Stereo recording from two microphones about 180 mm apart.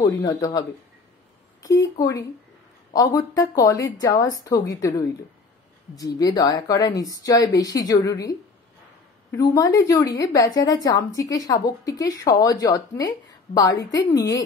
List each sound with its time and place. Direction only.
0.0 s a woman's voice: 20° left (ahead or behind)
1.8 s a woman's voice: 20° left (ahead or behind)